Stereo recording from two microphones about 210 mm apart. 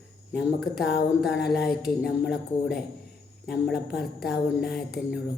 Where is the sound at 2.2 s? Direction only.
50° left (ahead or behind).